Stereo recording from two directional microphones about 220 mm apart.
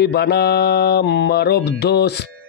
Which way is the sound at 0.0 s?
50° left (ahead or behind).